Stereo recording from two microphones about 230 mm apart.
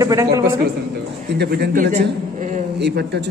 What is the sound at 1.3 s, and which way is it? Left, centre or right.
Speech, right.